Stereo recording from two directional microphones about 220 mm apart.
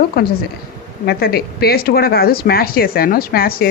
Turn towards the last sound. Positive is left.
turn(degrees=40)  # may be behind; listen again after turning